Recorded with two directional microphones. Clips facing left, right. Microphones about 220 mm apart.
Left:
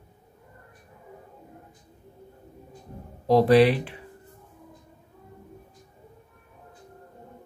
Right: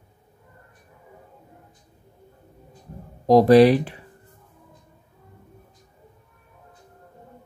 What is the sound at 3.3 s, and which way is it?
Speech, 40° right (ahead or behind).